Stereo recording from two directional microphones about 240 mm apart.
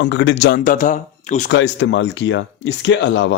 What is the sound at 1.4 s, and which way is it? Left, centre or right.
Speech, left.